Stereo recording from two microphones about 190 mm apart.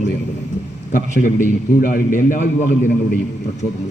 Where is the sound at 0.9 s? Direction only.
40° left (ahead or behind).